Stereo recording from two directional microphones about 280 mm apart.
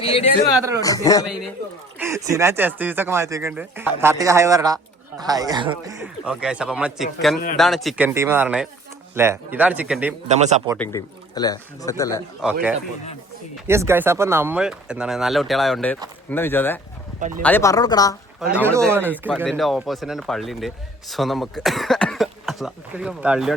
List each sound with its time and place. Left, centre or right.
0.8 s speech: centre
2.0 s speech: centre
10.3 s speech: right
10.8 s speech: centre
12.4 s speech: centre
13.7 s speech: centre
17.2 s speech: right
17.4 s speech: centre
18.5 s speech: centre